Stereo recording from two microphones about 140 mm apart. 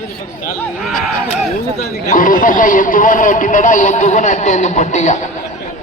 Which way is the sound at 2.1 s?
70° left (ahead or behind).